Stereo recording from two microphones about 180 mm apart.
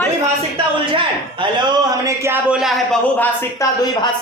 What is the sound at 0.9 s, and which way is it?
A man's voice, 25° right (ahead or behind).